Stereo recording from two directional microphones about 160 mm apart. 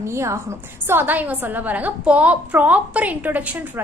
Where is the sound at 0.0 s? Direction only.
15° right (ahead or behind).